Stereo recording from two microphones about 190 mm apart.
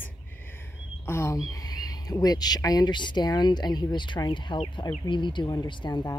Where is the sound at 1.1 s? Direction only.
15° left (ahead or behind).